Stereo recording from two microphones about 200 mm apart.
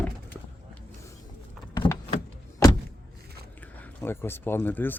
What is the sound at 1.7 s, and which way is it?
Power windows, 15° left (ahead or behind).